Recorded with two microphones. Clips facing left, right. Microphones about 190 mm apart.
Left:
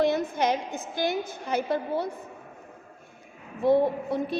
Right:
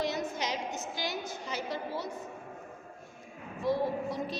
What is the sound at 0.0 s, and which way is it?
A woman's voice, 55° left (ahead or behind).